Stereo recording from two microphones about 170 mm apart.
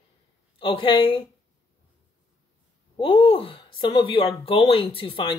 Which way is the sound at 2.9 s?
30° left (ahead or behind).